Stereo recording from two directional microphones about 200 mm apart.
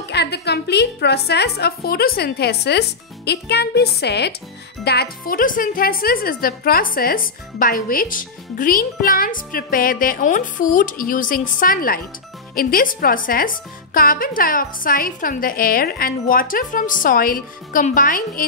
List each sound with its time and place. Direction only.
0.1 s a woman's voice: 55° left (ahead or behind)